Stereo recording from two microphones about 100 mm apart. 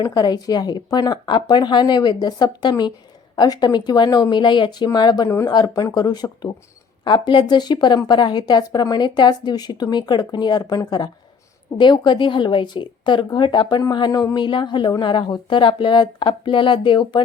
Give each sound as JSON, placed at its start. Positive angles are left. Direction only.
{"t": 0.0, "sound": "speech", "side_deg": 40}